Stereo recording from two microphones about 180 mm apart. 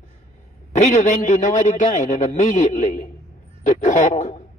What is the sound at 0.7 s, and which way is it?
A man's voice, 40° left (ahead or behind).